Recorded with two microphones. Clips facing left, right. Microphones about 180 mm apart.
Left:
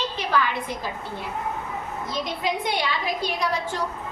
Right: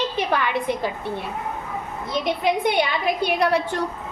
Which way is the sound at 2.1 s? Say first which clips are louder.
Right 6 dB; 60° right (ahead or behind).